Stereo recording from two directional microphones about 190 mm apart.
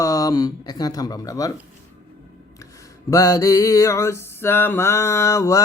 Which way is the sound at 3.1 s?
20° left (ahead or behind).